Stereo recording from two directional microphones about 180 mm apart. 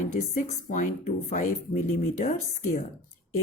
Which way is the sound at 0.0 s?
45° left (ahead or behind).